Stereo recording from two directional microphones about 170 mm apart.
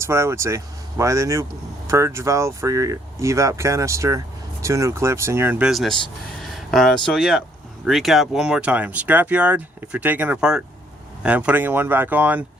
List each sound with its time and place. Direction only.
0.0 s speech: 15° right (ahead or behind)